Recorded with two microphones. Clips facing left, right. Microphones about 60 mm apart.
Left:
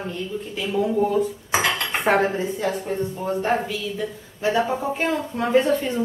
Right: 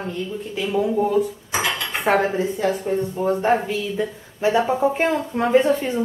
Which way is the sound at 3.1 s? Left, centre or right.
Right.